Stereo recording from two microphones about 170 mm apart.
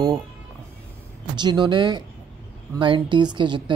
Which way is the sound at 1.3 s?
25° right (ahead or behind).